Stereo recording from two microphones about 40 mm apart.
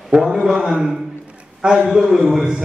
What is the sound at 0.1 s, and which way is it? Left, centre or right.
Mantra, centre.